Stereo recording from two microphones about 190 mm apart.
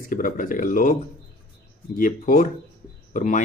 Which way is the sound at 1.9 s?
45° left (ahead or behind).